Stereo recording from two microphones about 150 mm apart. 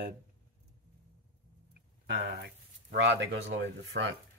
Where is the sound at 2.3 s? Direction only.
90° right.